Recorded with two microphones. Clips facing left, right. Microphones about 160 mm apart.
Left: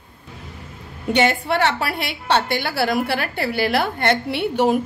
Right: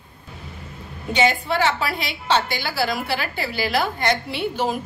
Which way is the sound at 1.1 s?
65° left (ahead or behind).